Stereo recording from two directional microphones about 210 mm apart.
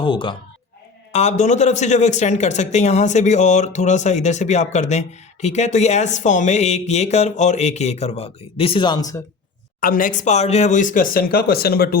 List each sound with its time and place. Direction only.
0.0 s a man's voice: 25° left (ahead or behind)
9.8 s a man's voice: 40° left (ahead or behind)